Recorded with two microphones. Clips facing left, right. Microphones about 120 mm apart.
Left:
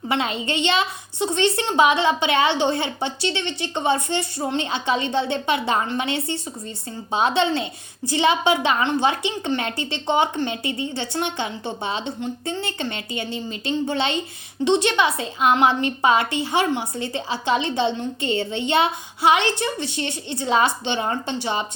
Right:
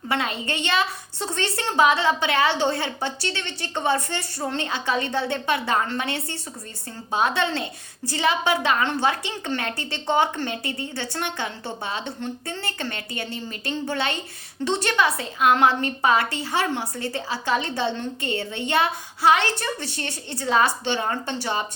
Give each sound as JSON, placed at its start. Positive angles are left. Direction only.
{"t": 0.1, "sound": "a woman's voice", "side_deg": 25}